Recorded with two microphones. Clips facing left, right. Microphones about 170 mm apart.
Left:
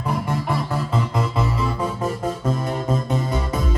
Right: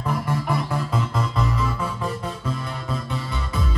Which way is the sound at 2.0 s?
45° left (ahead or behind).